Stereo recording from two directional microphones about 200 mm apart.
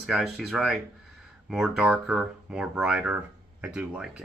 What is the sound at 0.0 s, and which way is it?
Speech, centre (ahead or behind).